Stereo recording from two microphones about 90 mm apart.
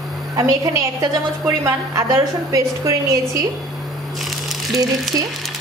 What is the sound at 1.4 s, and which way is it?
A woman's voice, 35° right (ahead or behind).